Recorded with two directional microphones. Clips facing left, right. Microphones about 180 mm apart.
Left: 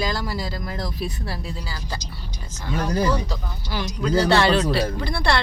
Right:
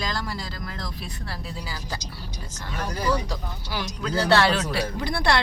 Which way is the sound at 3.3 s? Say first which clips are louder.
Left 2 dB; 10° right (ahead or behind).